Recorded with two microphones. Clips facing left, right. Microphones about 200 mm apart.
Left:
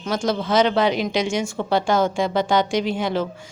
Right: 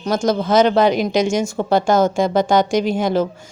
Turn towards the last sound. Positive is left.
turn(degrees=-40)  # may be behind; listen again after turning